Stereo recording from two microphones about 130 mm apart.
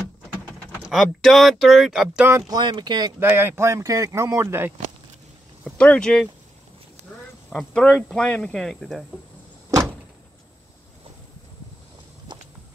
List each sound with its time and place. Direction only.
0.8 s speech: centre (ahead or behind)
2.2 s speech: 20° right (ahead or behind)
2.5 s speech: 35° right (ahead or behind)
3.2 s speech: 15° right (ahead or behind)
5.6 s speech: 10° left (ahead or behind)
7.4 s speech: 5° left (ahead or behind)